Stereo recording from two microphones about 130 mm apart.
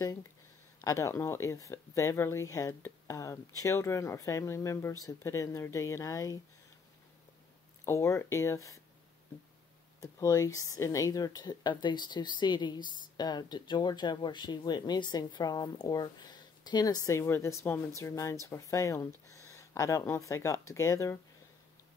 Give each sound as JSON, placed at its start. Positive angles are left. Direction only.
{"t": 0.7, "sound": "speech", "side_deg": 25}
{"t": 7.8, "sound": "speech", "side_deg": 20}
{"t": 9.9, "sound": "speech", "side_deg": 25}